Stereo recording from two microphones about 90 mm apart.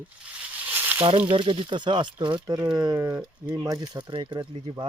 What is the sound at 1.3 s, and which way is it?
Speech, 65° right (ahead or behind).